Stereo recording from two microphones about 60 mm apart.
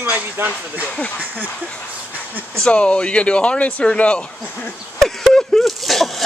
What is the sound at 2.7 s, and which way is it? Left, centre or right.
Speech, centre.